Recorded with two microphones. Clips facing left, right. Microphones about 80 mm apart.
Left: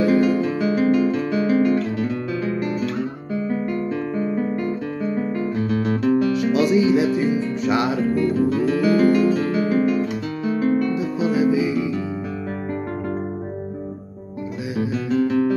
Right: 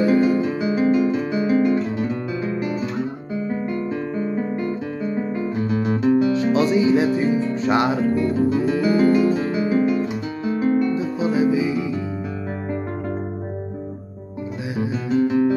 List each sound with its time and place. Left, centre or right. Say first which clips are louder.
0.0 s music: even; centre
1.8 s guitar: even; centre
3.6 s music: left 1 dB; centre
6.3 s music: even; right
8.0 s music: even; centre
8.4 s music: even; centre
10.4 s music: right 1 dB; right
11.0 s music: even; right
14.8 s music: even; right